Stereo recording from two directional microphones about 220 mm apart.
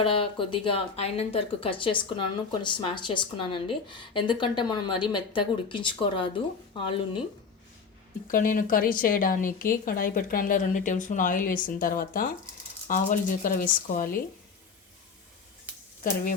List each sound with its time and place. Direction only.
0.0 s a woman's voice: 25° left (ahead or behind)
8.3 s a woman's voice: 40° left (ahead or behind)